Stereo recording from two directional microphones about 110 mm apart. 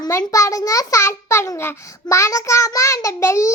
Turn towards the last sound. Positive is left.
turn(degrees=25)  # may be behind; listen again after turning